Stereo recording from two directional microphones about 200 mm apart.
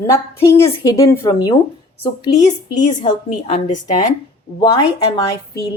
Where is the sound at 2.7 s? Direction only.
40° left (ahead or behind).